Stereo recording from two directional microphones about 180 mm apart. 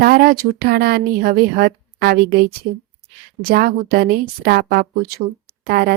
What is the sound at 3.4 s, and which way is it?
A woman's voice, 55° right (ahead or behind).